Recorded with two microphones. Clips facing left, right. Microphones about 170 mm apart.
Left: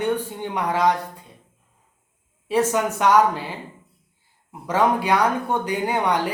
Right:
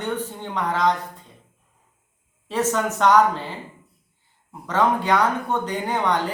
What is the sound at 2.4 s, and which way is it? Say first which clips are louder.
A man's voice: left 2 dB; 10° left (ahead or behind).